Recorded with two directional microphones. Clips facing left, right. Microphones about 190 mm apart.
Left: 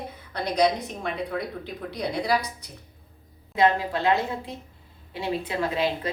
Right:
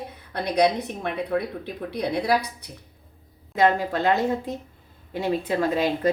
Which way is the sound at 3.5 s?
45° right (ahead or behind).